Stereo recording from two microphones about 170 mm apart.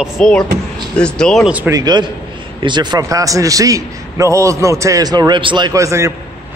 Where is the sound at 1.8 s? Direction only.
25° right (ahead or behind).